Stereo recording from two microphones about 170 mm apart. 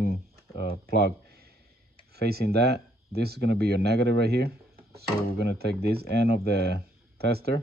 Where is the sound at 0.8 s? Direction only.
65° right (ahead or behind).